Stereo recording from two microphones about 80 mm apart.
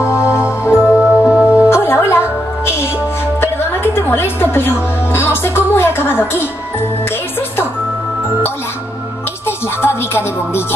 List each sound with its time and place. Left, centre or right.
0.0 s music: left
0.7 s music: centre
1.7 s music: left
9.8 s speech: left